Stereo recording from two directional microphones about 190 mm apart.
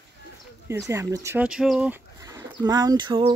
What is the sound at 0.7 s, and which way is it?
Speech, 15° right (ahead or behind).